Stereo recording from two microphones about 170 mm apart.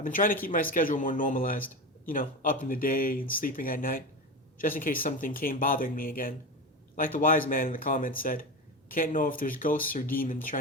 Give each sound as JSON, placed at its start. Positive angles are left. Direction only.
{"t": 0.0, "sound": "speech", "side_deg": 55}